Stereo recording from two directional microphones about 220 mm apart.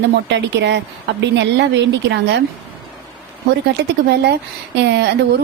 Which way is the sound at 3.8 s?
50° right (ahead or behind).